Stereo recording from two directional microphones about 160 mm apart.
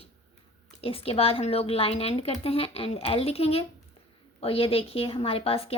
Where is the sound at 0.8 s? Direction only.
35° left (ahead or behind).